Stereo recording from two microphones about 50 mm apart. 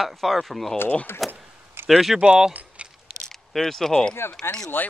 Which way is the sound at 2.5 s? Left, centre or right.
Right.